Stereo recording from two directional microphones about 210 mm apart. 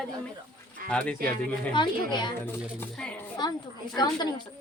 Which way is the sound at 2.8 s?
5° left (ahead or behind).